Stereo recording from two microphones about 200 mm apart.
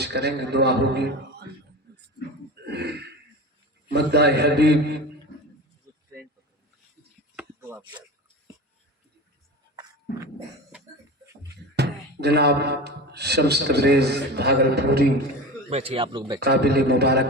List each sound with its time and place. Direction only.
0.0 s a man's voice: 55° right (ahead or behind)
1.9 s a sound: 55° right (ahead or behind)
2.6 s throat clearing: 55° right (ahead or behind)
3.8 s a man's voice: 55° right (ahead or behind)
7.3 s chopping: 10° right (ahead or behind)
11.8 s speech: 55° right (ahead or behind)
15.7 s speech: 30° right (ahead or behind)
16.4 s a man's voice: 55° right (ahead or behind)